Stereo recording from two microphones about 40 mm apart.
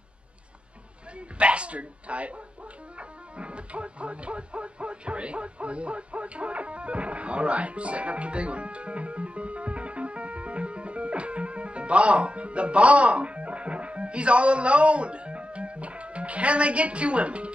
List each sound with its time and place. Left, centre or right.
1.4 s speech: right